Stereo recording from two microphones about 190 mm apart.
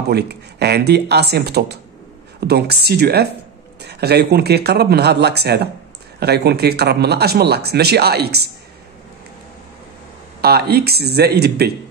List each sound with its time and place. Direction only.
0.1 s speech: 60° right (ahead or behind)
10.4 s speech: 55° right (ahead or behind)